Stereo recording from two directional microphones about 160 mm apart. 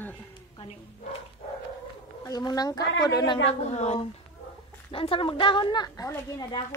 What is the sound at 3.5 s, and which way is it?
A woman's voice, 45° left (ahead or behind).